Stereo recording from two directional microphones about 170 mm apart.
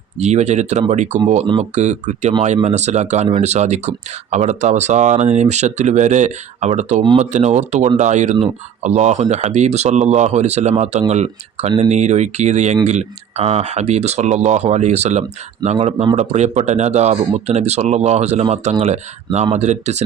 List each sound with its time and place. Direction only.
0.2 s speech: 40° right (ahead or behind)